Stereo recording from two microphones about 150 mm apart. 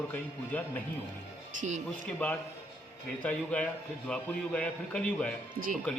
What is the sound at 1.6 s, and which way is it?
Speech, 50° right (ahead or behind).